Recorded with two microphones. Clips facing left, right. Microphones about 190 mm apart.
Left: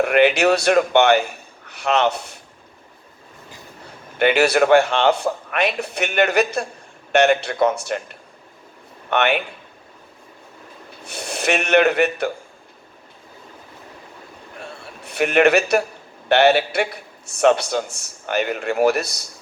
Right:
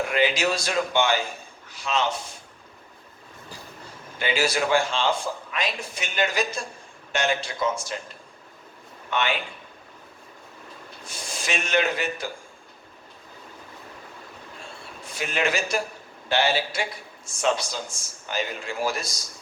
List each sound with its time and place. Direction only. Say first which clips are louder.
0.0 s a man's voice: left 8 dB; 65° left (ahead or behind)
4.2 s a man's voice: left 9 dB; 65° left (ahead or behind)
11.0 s a man's voice: left 10 dB; 65° left (ahead or behind)
14.6 s a sound: left 7 dB; 65° left (ahead or behind)
16.3 s a man's voice: left 9 dB; 65° left (ahead or behind)